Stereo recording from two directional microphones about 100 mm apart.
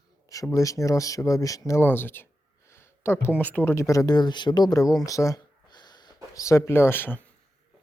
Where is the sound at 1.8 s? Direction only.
20° left (ahead or behind).